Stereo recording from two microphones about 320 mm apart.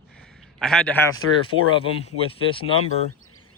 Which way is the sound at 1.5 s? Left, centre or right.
Right.